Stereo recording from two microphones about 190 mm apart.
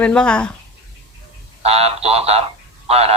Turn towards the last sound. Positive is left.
turn(degrees=-30)  # may be behind; listen again after turning